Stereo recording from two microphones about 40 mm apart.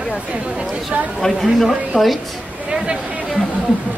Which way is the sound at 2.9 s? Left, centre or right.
Right.